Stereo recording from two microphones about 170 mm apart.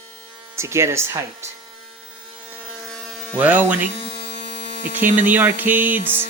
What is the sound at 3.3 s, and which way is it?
Speech, 10° right (ahead or behind).